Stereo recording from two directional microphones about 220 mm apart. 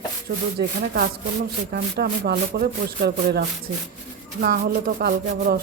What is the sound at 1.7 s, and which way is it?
Speech, 45° right (ahead or behind).